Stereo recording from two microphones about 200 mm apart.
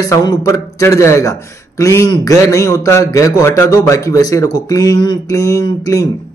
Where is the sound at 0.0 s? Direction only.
15° left (ahead or behind).